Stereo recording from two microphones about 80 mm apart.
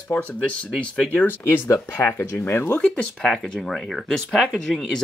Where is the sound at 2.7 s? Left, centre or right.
Centre.